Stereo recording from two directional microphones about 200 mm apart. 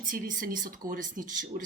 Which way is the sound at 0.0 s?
40° right (ahead or behind).